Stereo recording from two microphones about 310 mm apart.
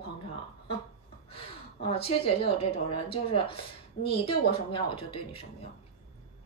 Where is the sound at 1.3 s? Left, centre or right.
Centre.